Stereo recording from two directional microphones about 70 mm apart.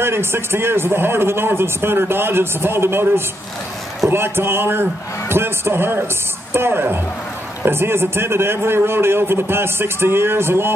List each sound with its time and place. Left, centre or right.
0.0 s a man's voice: right